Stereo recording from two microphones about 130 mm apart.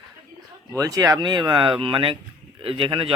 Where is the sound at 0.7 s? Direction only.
25° right (ahead or behind).